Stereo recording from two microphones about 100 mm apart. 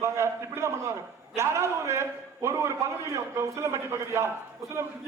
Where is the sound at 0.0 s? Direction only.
25° right (ahead or behind).